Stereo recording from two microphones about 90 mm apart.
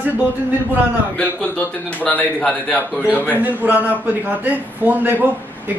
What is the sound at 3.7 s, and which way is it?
A man's voice, 20° right (ahead or behind).